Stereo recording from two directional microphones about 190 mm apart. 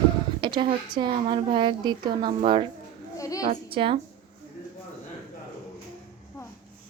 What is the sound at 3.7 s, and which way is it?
Speech, 25° right (ahead or behind).